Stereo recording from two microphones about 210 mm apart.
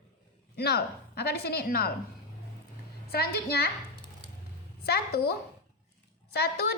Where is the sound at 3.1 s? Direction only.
45° left (ahead or behind).